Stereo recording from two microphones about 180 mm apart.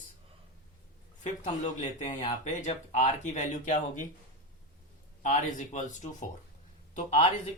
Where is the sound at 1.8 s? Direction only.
40° left (ahead or behind).